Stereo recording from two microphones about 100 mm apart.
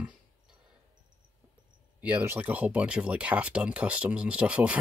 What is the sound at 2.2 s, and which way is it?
Speech, 20° right (ahead or behind).